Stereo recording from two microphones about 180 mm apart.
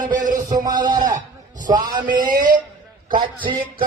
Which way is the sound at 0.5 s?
20° right (ahead or behind).